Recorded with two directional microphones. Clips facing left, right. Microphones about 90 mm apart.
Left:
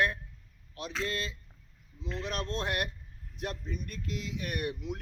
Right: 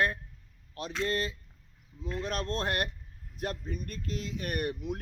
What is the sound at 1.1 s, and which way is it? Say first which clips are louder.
Speech: right 7 dB; 40° right (ahead or behind).